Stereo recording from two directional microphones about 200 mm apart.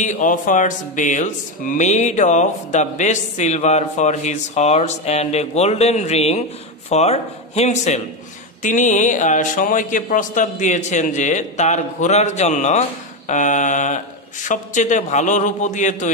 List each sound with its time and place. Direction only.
0.0 s speech: 40° left (ahead or behind)